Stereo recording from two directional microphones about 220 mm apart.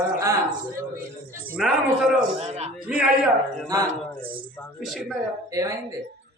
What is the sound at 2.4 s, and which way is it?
Speech, 30° right (ahead or behind).